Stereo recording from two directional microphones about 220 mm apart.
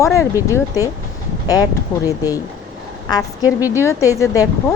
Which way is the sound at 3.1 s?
20° left (ahead or behind).